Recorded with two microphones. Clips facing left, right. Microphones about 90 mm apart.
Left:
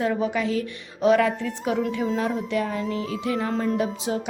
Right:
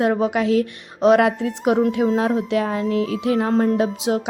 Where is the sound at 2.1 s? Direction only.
90° right.